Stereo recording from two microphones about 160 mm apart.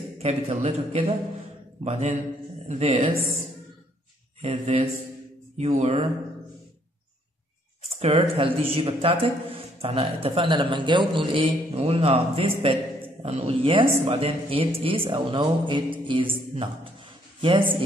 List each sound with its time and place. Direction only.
0.2 s a man's voice: 45° right (ahead or behind)
4.4 s speech: 40° right (ahead or behind)
7.8 s a man's voice: 40° right (ahead or behind)